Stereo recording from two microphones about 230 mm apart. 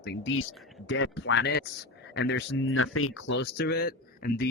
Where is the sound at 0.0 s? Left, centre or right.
Left.